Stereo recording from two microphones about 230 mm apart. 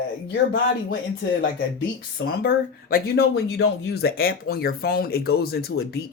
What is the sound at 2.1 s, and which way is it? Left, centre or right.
Speech, left.